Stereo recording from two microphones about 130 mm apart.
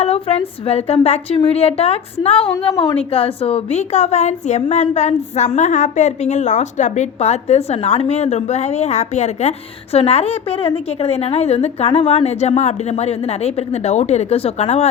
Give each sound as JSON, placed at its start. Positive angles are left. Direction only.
{"t": 0.0, "sound": "a woman's voice", "side_deg": 50}